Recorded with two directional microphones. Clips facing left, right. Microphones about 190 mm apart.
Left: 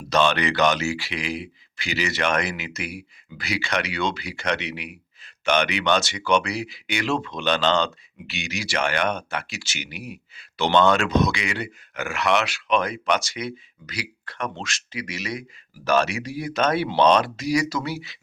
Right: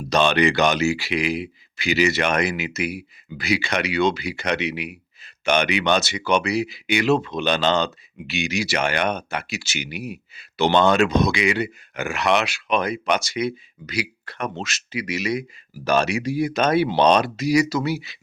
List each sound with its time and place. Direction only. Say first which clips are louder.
0.1 s speech: right 3 dB; 15° right (ahead or behind)